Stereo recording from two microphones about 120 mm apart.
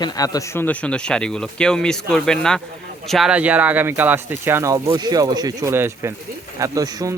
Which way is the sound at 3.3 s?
10° right (ahead or behind).